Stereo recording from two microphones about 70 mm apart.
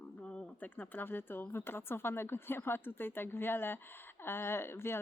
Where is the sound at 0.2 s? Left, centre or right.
Centre.